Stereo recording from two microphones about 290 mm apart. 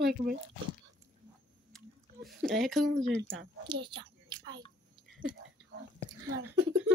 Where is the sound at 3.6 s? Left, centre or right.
Centre.